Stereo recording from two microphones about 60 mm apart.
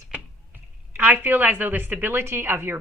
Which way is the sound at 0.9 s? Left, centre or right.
Right.